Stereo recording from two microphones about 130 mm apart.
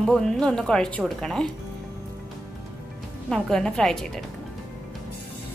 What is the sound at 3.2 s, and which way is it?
Speech, 5° left (ahead or behind).